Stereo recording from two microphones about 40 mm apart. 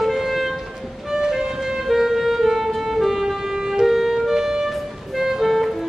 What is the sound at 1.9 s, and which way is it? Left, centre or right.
Music, centre.